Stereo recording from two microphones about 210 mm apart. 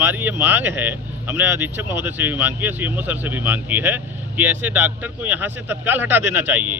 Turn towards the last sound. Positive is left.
turn(degrees=-10)  # may be behind; listen again after turning